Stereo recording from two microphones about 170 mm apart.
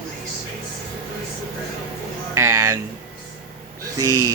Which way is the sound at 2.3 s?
15° right (ahead or behind).